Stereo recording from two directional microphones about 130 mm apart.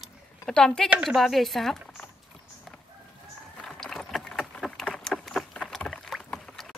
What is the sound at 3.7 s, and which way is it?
Vehicle, centre (ahead or behind).